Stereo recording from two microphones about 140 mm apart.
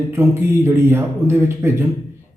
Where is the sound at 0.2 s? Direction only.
20° right (ahead or behind).